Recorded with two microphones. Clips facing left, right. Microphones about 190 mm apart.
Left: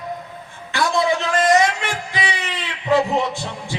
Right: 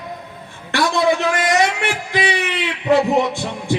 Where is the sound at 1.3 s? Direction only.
75° right (ahead or behind).